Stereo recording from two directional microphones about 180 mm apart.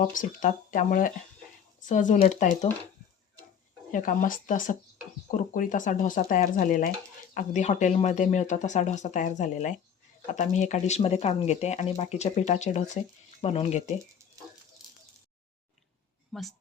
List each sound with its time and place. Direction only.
0.0 s speech: 45° left (ahead or behind)
3.9 s speech: 50° left (ahead or behind)
16.3 s a woman's voice: centre (ahead or behind)